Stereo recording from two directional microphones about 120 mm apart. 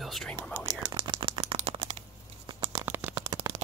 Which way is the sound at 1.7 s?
50° right (ahead or behind).